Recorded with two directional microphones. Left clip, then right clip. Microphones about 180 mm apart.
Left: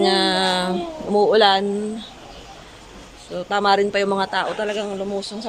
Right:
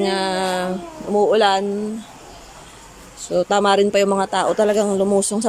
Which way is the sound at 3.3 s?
20° right (ahead or behind).